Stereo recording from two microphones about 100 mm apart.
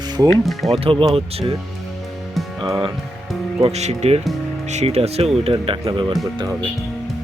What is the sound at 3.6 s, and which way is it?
Speech, 90° right.